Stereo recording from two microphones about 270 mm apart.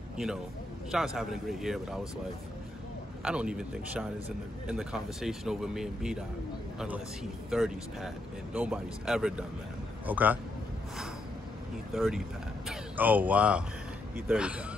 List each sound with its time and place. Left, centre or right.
0.9 s speech: centre
3.2 s speech: centre
7.5 s speech: centre
11.9 s speech: centre